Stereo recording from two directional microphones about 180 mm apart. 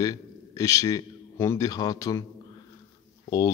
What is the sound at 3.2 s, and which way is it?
Speech, 20° left (ahead or behind).